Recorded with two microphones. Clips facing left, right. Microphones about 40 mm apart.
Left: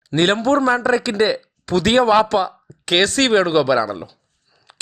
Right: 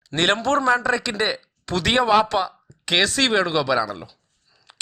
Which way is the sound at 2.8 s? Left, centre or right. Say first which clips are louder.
Left 3 dB; left.